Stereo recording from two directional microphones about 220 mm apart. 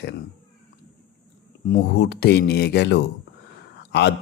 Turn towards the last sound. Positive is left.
turn(degrees=50)  # may be behind; listen again after turning